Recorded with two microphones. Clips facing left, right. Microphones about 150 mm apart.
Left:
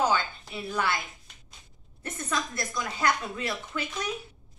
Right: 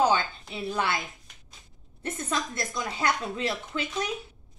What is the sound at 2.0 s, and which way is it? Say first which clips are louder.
A woman's voice: right 1 dB; 25° right (ahead or behind).